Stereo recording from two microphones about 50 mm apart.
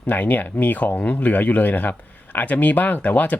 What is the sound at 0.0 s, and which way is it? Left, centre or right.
Speech, left.